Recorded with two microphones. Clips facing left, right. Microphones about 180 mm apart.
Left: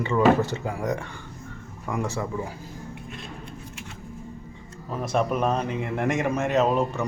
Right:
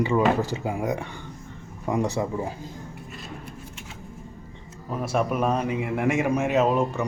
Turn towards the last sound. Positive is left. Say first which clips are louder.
# even
turn(degrees=-5)  # may be behind; listen again after turning